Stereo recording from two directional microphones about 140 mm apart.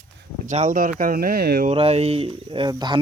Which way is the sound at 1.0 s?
85° right.